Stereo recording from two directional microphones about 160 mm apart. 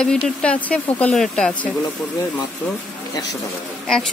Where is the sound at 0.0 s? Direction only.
5° left (ahead or behind).